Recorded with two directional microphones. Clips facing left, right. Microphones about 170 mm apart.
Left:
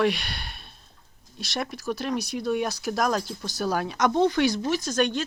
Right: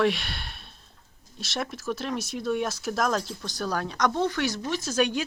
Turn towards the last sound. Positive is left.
turn(degrees=-10)  # may be behind; listen again after turning